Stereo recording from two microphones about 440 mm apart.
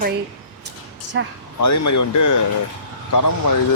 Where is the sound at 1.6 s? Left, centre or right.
Left.